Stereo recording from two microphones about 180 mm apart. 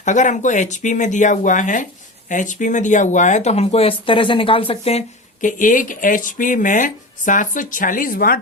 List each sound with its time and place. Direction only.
0.0 s speech: 40° left (ahead or behind)